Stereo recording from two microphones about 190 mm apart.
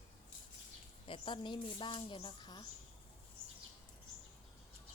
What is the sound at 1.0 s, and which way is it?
A woman's voice, 25° left (ahead or behind).